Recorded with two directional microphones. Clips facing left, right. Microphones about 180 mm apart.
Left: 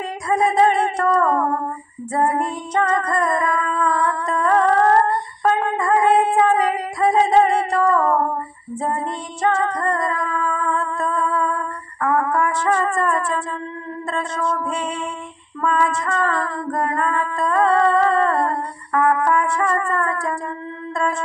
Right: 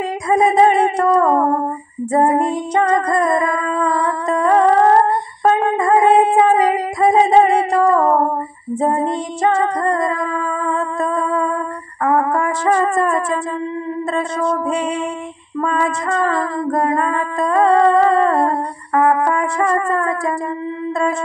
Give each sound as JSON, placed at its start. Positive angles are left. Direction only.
{"t": 0.3, "sound": "a sound", "side_deg": -15}
{"t": 2.7, "sound": "music", "side_deg": -15}
{"t": 5.8, "sound": "humming", "side_deg": -15}
{"t": 9.8, "sound": "music", "side_deg": -15}
{"t": 12.0, "sound": "brass instrument", "side_deg": -25}
{"t": 12.3, "sound": "brass instrument", "side_deg": -40}
{"t": 12.8, "sound": "music", "side_deg": -10}
{"t": 15.6, "sound": "music", "side_deg": -25}
{"t": 16.1, "sound": "music", "side_deg": -15}